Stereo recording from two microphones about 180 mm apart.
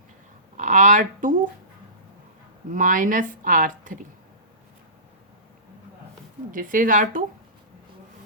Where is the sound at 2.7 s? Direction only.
45° right (ahead or behind).